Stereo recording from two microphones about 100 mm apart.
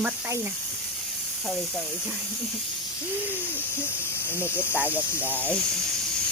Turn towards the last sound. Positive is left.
turn(degrees=15)  # may be behind; listen again after turning